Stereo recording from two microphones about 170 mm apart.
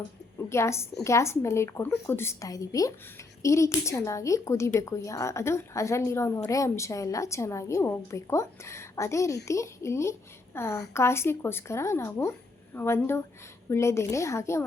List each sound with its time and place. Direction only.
0.3 s a woman's voice: 15° left (ahead or behind)